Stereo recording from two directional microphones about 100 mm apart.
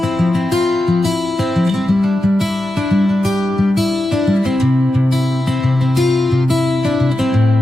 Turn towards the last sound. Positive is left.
turn(degrees=0)  # may be behind; listen again after turning